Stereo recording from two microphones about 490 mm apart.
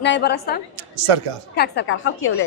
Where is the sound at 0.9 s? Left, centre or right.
Right.